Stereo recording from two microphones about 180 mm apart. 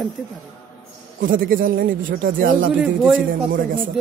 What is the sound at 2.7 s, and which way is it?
Speech, 5° right (ahead or behind).